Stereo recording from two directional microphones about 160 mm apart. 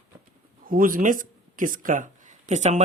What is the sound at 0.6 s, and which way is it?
Speech, 60° right (ahead or behind).